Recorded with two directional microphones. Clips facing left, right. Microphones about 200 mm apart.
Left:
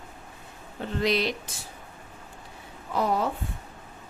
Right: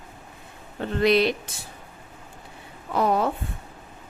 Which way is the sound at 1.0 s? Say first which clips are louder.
Right 6 dB; 60° right (ahead or behind).